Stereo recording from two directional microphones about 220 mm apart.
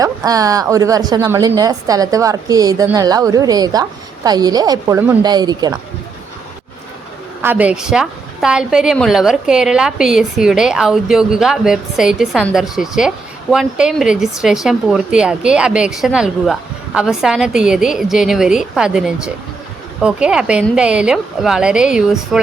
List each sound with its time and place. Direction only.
0.3 s a woman's voice: 15° right (ahead or behind)
7.4 s a woman's voice: 5° right (ahead or behind)